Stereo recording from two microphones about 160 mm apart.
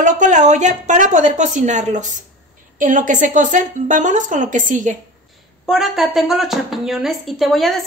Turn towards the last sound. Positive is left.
turn(degrees=0)  # may be behind; listen again after turning